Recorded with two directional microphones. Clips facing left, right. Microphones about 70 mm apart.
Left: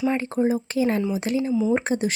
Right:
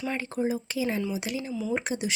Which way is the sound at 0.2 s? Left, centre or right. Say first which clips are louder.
Left 6 dB; left.